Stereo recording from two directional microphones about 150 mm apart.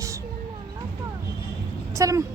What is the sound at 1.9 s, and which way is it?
Speech, 20° right (ahead or behind).